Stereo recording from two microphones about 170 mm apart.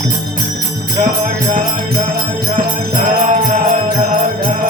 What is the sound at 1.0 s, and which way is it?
Jingle bell, 50° right (ahead or behind).